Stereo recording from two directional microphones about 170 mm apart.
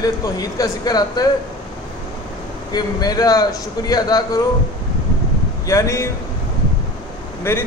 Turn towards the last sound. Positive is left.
turn(degrees=15)  # may be behind; listen again after turning